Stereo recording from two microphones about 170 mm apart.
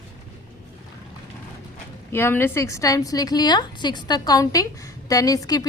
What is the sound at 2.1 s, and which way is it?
A woman's voice, 15° left (ahead or behind).